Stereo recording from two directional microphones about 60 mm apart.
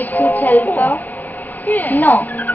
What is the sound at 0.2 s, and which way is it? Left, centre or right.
Speech, left.